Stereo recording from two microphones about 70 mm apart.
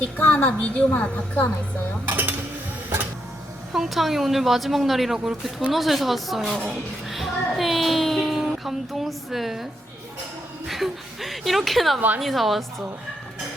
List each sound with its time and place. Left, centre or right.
0.2 s a woman's voice: left
0.9 s a woman's voice: centre
2.0 s dishes: right
3.7 s speech: centre
10.7 s speech: centre
11.9 s a woman's voice: right
12.2 s speech: centre